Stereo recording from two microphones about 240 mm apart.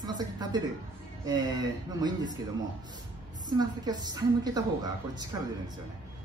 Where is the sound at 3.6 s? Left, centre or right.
Centre.